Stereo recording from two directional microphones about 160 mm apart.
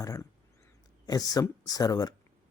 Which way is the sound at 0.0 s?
20° left (ahead or behind).